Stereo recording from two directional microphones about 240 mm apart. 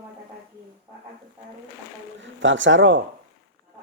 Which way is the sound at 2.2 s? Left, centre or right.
Right.